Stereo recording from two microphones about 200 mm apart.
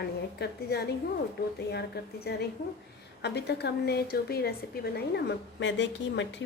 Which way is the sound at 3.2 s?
55° left (ahead or behind).